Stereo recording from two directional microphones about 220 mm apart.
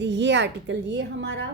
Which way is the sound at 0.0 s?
55° right (ahead or behind).